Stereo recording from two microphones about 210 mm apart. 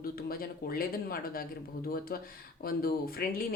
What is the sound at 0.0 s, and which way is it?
Speech, 45° left (ahead or behind).